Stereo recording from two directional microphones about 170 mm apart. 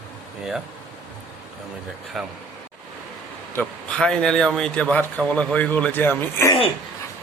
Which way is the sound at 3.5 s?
5° left (ahead or behind).